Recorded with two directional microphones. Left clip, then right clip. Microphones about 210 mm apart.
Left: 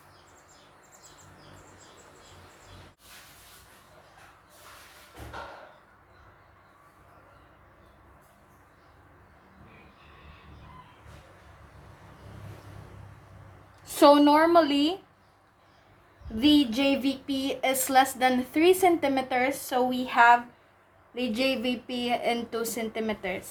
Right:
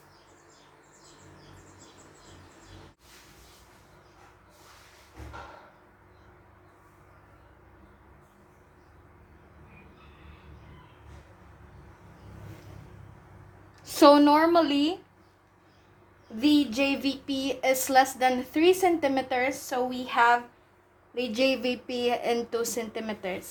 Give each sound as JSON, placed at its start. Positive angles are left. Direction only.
{"t": 13.8, "sound": "a woman's voice", "side_deg": -25}
{"t": 16.4, "sound": "a woman's voice", "side_deg": -15}